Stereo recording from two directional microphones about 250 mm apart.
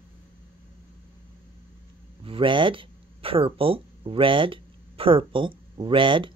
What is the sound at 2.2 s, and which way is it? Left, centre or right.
Speech, right.